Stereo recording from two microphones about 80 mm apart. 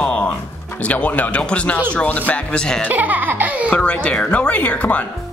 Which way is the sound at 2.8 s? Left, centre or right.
Centre.